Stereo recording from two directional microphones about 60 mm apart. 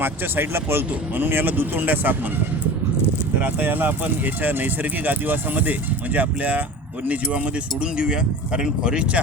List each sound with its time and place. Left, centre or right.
0.0 s speech: right
3.4 s speech: right; by 9.2 s centre